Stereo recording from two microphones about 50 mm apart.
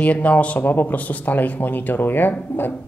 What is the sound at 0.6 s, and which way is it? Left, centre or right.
Speech, left.